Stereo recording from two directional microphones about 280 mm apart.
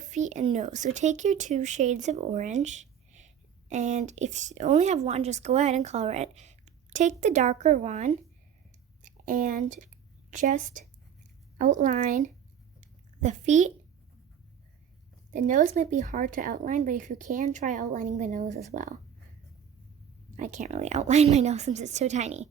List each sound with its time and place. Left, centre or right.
0.0 s speech: right
12.8 s a sound: right
15.3 s speech: right
20.3 s speech: right